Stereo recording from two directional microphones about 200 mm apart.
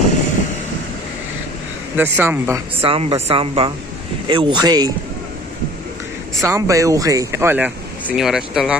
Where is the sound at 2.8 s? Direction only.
30° right (ahead or behind).